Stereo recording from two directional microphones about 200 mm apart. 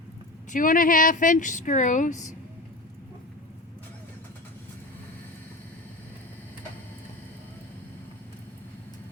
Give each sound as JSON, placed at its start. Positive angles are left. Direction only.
{"t": 0.5, "sound": "speech", "side_deg": 45}